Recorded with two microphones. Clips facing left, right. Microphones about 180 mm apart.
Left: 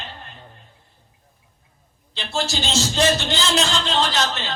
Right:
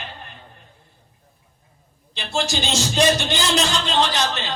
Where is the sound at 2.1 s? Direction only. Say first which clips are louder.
Right 1 dB; 15° right (ahead or behind).